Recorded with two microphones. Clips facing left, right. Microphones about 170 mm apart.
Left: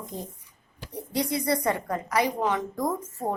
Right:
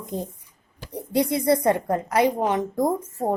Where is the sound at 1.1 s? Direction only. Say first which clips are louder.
Right 6 dB; 55° right (ahead or behind).